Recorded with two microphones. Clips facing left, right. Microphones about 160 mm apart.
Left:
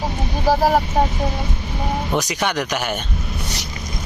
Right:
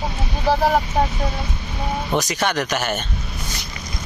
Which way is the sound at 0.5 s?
10° left (ahead or behind).